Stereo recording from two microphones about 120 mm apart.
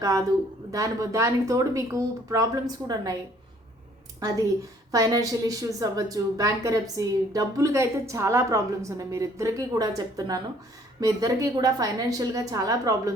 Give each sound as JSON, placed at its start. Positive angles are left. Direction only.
{"t": 0.0, "sound": "a woman's voice", "side_deg": -30}
{"t": 4.9, "sound": "a woman's voice", "side_deg": -30}